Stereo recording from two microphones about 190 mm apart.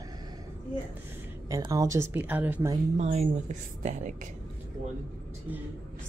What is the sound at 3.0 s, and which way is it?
A woman's voice, 35° right (ahead or behind).